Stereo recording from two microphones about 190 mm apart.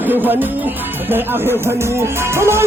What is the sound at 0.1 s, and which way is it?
Speech, 10° right (ahead or behind).